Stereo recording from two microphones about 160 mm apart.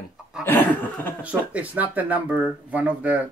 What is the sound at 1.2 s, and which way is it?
Speech, 10° right (ahead or behind).